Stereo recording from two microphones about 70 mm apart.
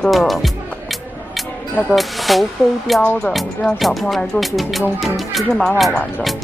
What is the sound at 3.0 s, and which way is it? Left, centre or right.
Speech, left.